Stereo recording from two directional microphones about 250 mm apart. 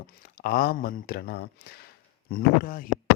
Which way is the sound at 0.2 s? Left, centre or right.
Left.